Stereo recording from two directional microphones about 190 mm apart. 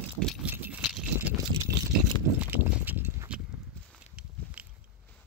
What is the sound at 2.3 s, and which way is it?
Walk, 10° right (ahead or behind).